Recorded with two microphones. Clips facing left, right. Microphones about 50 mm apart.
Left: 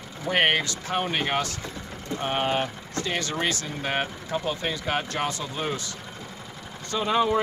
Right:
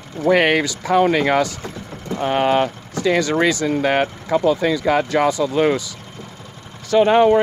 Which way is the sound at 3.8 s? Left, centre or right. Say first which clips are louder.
Right 5 dB; right.